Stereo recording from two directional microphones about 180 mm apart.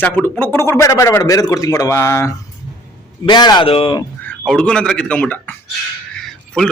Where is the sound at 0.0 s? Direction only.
10° left (ahead or behind); by 4.0 s 30° left (ahead or behind).